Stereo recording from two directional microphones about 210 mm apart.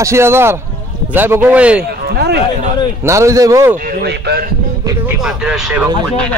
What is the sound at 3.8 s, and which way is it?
Speech, 50° right (ahead or behind).